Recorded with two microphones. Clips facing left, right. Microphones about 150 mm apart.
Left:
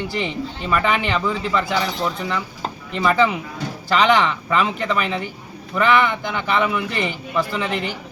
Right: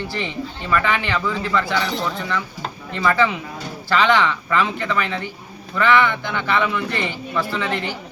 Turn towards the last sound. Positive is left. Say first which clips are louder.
# left 1 dB
turn(degrees=10)  # may be behind; listen again after turning